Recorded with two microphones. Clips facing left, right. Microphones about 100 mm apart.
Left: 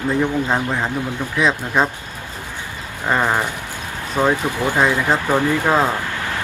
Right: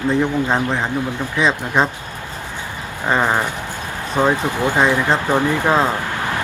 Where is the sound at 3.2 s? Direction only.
10° right (ahead or behind).